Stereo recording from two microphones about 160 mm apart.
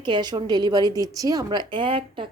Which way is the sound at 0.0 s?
30° right (ahead or behind).